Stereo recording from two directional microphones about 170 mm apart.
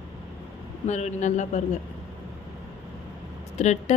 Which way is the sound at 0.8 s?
45° left (ahead or behind).